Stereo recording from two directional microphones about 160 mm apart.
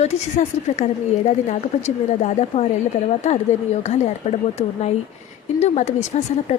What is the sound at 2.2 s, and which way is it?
Speech, 45° left (ahead or behind).